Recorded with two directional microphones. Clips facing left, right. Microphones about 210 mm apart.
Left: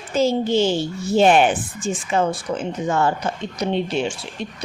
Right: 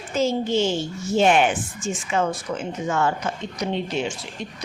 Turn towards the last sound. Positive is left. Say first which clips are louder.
# left 3 dB
turn(degrees=30)  # may be behind; listen again after turning